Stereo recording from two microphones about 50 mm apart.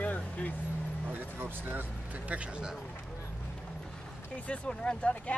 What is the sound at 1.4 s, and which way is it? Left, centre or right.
Speech, right.